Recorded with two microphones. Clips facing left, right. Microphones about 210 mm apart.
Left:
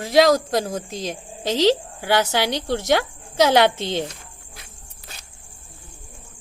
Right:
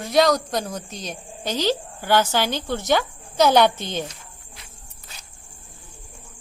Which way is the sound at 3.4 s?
90° left.